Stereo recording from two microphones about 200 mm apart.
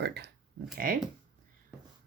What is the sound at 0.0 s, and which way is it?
Speech, 55° right (ahead or behind).